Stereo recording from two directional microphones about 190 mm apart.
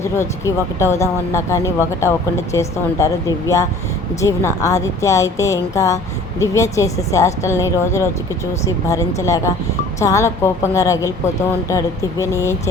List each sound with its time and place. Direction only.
0.0 s speech: 15° left (ahead or behind)